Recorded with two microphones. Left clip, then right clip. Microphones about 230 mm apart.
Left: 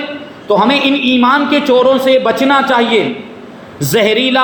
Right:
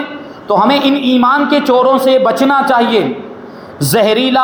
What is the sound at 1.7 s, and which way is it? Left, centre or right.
Speech, centre.